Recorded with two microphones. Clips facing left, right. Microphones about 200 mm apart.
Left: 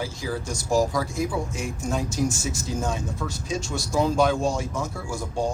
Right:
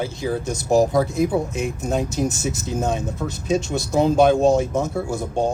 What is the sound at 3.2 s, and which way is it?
Speech, 35° right (ahead or behind).